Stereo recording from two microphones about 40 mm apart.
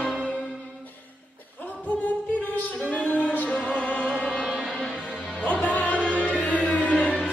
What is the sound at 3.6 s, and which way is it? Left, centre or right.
Music, left.